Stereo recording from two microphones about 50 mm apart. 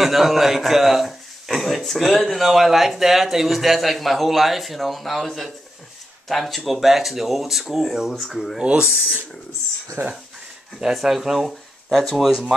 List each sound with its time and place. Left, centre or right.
0.0 s a man's voice: centre
8.2 s a man's voice: centre
8.6 s speech: centre
10.0 s speech: right
10.8 s a man's voice: centre
12.3 s speech: centre